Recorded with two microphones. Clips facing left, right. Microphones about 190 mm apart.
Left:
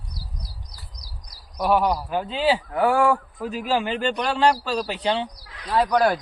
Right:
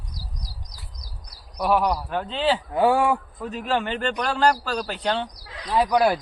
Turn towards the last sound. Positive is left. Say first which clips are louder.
# even
turn(degrees=-10)  # may be behind; listen again after turning